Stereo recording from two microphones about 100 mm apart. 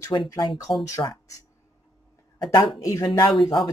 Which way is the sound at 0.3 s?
40° left (ahead or behind).